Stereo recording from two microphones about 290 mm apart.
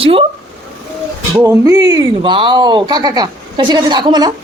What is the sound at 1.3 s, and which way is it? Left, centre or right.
Speech, centre.